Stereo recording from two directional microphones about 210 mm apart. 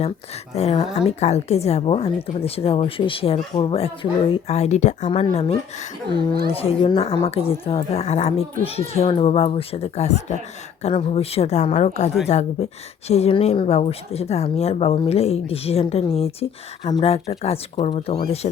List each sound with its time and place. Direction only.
0.5 s a woman's voice: 30° left (ahead or behind)